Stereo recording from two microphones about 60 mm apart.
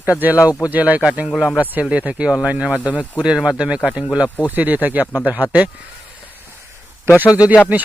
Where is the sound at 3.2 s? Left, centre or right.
Centre.